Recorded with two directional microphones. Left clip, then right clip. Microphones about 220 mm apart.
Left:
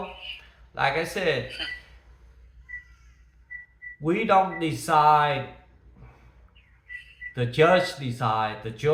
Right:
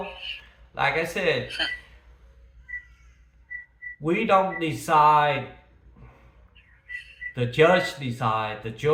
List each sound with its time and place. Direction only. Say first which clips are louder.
0.0 s a sound: right 2 dB; 40° right (ahead or behind)
0.7 s speech: right 1 dB; 5° right (ahead or behind)
1.5 s speech: right 5 dB; 40° right (ahead or behind)
4.0 s speech: even; centre (ahead or behind)
6.8 s a sound: right 3 dB; 40° right (ahead or behind)
7.3 s speech: right 1 dB; 5° right (ahead or behind)